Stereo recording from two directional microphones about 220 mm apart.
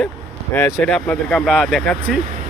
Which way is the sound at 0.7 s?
Centre (ahead or behind).